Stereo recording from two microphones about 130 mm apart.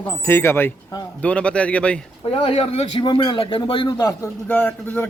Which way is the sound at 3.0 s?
35° left (ahead or behind).